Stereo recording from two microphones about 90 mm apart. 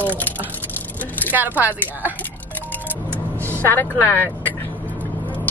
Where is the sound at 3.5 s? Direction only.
20° left (ahead or behind).